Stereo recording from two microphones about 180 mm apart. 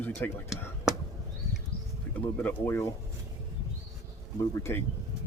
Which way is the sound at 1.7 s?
60° left (ahead or behind).